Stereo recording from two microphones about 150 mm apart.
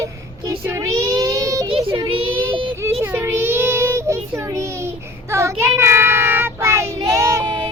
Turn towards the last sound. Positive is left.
turn(degrees=-20)  # may be behind; listen again after turning